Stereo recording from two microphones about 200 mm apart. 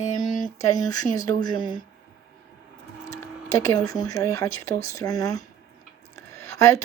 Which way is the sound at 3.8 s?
20° left (ahead or behind).